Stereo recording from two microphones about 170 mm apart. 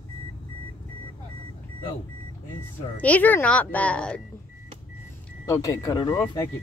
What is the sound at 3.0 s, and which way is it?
Speech, 10° left (ahead or behind).